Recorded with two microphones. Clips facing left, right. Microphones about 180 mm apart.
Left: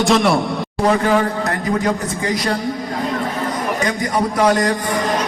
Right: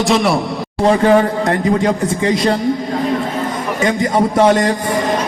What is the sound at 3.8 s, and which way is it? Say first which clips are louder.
Speech: right 7 dB; 25° right (ahead or behind).